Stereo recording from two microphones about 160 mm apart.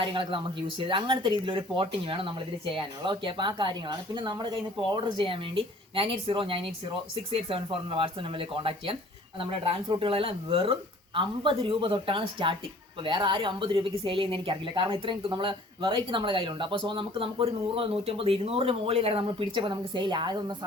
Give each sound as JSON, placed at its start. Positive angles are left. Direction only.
{"t": 0.0, "sound": "a woman's voice", "side_deg": -30}